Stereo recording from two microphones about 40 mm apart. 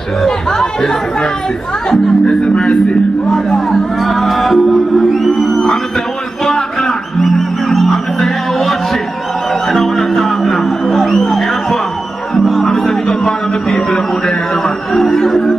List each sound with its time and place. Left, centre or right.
0.2 s speech: centre
3.3 s speech: centre
6.4 s music: centre
12.8 s a sound: centre